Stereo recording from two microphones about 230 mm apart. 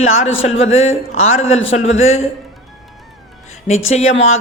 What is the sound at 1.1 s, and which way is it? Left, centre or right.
Speech, left.